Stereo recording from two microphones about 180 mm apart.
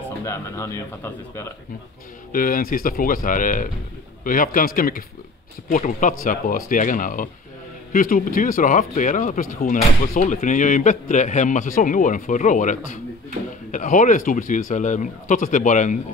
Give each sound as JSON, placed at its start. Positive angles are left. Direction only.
{"t": 0.2, "sound": "speech", "side_deg": 15}
{"t": 2.3, "sound": "a man's voice", "side_deg": 50}